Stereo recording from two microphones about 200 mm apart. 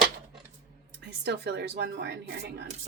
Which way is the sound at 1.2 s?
55° right (ahead or behind).